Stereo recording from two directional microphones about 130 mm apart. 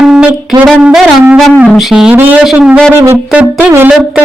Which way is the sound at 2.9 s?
20° right (ahead or behind).